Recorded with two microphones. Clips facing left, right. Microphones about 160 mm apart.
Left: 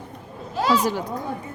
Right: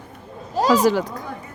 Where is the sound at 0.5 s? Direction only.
40° right (ahead or behind).